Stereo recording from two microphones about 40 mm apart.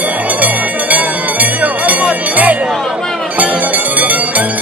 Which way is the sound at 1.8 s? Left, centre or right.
Right.